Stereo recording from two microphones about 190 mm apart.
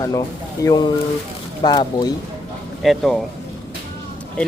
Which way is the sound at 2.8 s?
Centre (ahead or behind).